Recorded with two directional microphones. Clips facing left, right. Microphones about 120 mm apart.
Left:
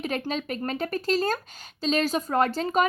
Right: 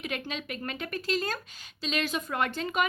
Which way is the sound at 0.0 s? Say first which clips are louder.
Left 6 dB; 40° left (ahead or behind).